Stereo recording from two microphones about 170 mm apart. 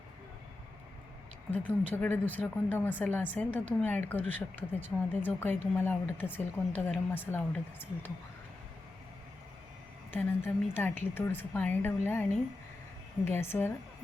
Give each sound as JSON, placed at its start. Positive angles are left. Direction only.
{"t": 1.5, "sound": "speech", "side_deg": 10}
{"t": 10.1, "sound": "speech", "side_deg": 10}
{"t": 13.2, "sound": "speech", "side_deg": 15}